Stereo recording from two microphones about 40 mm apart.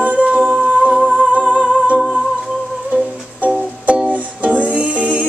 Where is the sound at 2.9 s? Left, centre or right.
Right.